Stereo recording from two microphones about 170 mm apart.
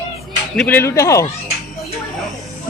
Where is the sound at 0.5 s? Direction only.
10° left (ahead or behind).